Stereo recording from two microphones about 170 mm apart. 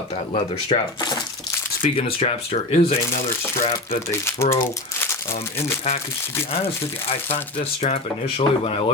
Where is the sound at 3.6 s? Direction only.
35° left (ahead or behind).